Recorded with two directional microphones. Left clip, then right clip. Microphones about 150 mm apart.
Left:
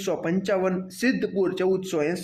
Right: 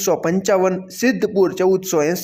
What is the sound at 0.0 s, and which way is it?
Speech, 35° right (ahead or behind).